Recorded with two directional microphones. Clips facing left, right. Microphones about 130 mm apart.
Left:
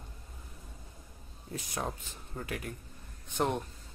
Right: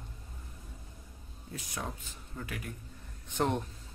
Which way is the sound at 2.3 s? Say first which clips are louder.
Left 3 dB; 40° left (ahead or behind).